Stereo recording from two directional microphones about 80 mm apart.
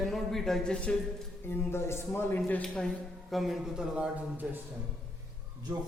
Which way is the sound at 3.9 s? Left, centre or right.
Centre.